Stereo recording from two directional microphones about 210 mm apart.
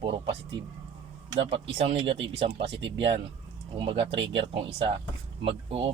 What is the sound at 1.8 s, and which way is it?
Speech, 25° right (ahead or behind).